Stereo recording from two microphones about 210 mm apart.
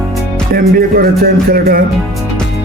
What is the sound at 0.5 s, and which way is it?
Music, 45° right (ahead or behind).